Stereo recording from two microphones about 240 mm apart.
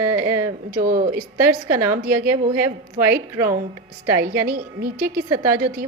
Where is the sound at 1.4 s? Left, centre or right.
Centre.